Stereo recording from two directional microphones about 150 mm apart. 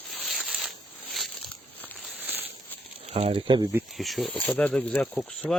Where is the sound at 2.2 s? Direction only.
10° right (ahead or behind).